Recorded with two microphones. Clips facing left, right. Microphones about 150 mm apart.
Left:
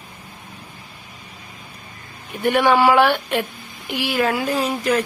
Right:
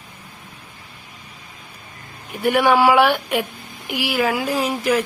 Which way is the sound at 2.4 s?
10° right (ahead or behind).